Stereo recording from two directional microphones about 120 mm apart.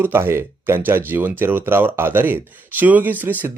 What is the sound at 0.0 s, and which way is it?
Speech, 20° right (ahead or behind).